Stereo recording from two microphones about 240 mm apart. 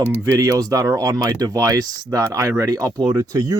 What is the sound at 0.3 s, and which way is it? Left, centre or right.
Speech, centre.